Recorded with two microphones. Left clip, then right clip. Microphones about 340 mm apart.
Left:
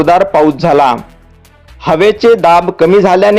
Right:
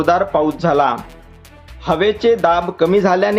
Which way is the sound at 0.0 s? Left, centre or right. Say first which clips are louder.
Left 7 dB; left.